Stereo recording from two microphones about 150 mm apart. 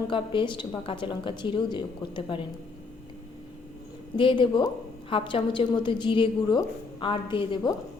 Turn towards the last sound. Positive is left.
turn(degrees=35)  # may be behind; listen again after turning